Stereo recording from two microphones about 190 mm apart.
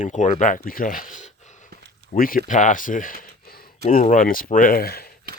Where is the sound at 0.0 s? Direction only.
40° left (ahead or behind).